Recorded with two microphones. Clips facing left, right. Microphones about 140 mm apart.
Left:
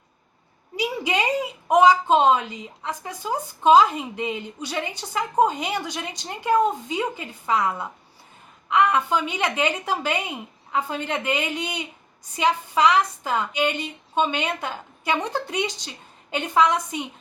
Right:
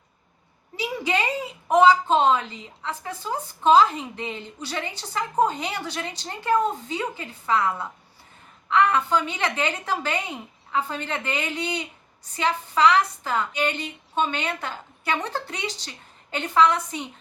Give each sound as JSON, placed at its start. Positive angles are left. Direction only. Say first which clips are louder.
{"t": 0.8, "sound": "a woman's voice", "louder": "left 1 dB", "side_deg": 15}